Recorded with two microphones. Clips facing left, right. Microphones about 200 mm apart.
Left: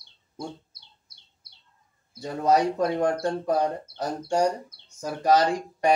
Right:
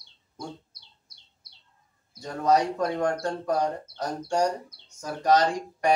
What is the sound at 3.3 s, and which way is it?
Speech, 5° left (ahead or behind).